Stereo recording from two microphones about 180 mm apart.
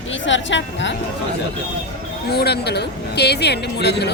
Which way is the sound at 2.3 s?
65° left (ahead or behind).